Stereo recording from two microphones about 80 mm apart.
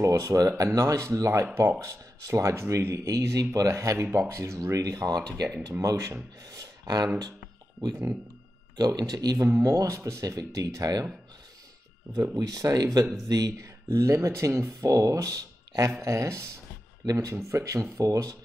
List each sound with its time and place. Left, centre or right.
0.0 s speech: right
6.5 s a sound: right
8.7 s speech: right
9.5 s speech: right
12.2 s speech: right
13.8 s speech: right
16.0 s speech: right